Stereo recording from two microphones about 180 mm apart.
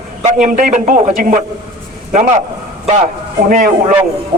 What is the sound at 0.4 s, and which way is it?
Speech, 45° right (ahead or behind).